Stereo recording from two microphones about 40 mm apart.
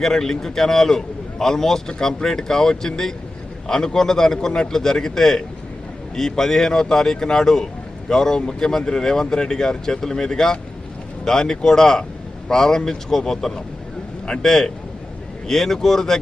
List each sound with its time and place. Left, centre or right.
0.0 s a man's voice: centre